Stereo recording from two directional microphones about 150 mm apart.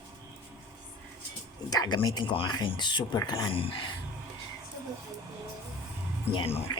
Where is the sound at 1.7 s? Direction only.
25° left (ahead or behind).